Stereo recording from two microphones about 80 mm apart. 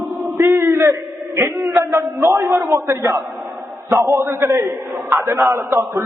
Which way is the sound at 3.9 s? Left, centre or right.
Right.